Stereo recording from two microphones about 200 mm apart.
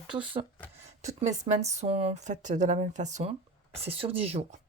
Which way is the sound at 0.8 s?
35° right (ahead or behind).